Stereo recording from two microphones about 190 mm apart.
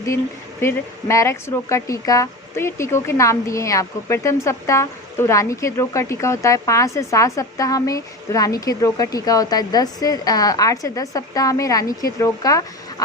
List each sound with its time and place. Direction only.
0.6 s speech: 15° left (ahead or behind)